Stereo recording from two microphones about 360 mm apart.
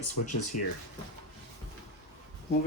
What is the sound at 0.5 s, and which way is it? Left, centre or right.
Speech, left.